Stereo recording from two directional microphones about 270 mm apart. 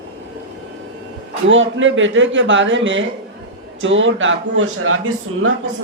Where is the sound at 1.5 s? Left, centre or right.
Right.